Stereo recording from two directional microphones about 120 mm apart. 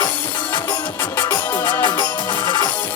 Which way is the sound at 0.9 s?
15° left (ahead or behind).